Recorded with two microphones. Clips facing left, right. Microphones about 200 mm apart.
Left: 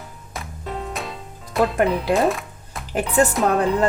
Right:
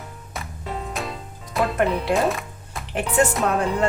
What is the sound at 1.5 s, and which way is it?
Speech, centre (ahead or behind).